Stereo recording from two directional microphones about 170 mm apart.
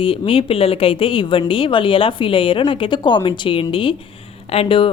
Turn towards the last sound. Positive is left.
turn(degrees=30)  # may be behind; listen again after turning